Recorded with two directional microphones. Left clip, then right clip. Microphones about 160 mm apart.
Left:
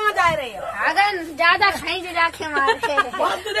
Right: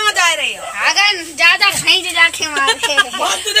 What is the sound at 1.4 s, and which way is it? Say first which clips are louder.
Speech: right 5 dB; 50° left (ahead or behind).